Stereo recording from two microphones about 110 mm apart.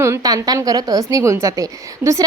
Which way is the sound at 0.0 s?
30° right (ahead or behind).